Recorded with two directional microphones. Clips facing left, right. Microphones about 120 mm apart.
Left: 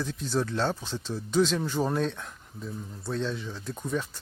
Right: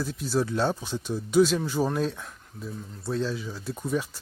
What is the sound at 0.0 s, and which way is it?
Speech, 5° right (ahead or behind).